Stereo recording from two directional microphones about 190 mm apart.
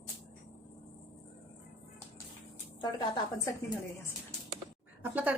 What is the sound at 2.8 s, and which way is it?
Speech, 25° left (ahead or behind).